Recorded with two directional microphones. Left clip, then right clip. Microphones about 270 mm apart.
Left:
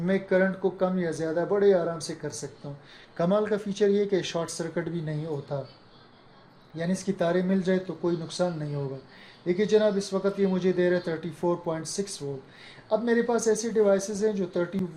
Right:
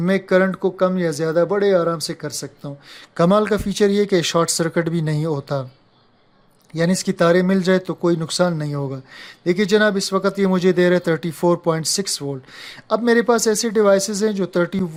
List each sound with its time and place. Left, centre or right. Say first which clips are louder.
0.0 s speech: right 7 dB; right
6.7 s speech: right 10 dB; right